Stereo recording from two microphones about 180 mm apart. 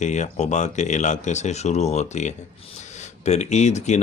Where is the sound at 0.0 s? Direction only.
40° left (ahead or behind).